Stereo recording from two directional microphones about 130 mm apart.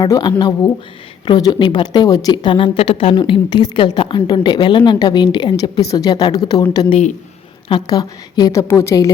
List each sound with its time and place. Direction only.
0.0 s a woman's voice: 30° left (ahead or behind)